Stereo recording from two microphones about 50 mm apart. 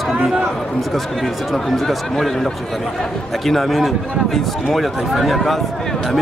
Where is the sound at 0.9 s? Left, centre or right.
Centre.